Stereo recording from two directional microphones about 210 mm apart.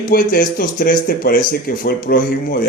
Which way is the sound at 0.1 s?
45° left (ahead or behind).